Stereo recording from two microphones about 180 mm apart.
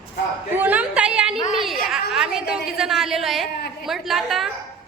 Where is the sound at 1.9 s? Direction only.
Centre (ahead or behind).